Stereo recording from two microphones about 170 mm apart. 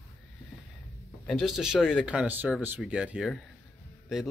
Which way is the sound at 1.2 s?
Centre (ahead or behind).